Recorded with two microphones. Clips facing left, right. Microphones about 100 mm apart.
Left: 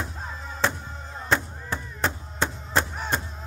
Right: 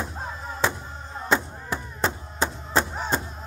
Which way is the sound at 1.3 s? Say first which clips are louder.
Right 1 dB; 15° right (ahead or behind).